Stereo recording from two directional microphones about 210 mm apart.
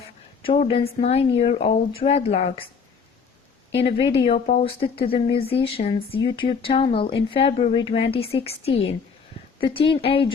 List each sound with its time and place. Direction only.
0.4 s speech: 25° left (ahead or behind)
3.7 s speech: 25° left (ahead or behind)